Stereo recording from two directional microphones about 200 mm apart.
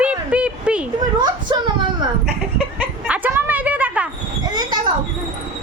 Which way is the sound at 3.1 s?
10° right (ahead or behind).